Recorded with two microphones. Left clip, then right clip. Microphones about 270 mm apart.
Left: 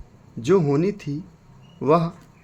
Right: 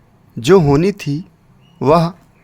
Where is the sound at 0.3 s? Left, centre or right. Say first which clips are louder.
Right 8 dB; right.